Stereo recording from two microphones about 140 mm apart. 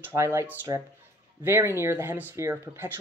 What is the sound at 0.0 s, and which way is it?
Speech, 20° right (ahead or behind).